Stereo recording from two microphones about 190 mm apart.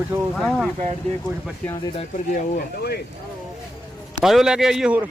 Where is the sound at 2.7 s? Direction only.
55° left (ahead or behind).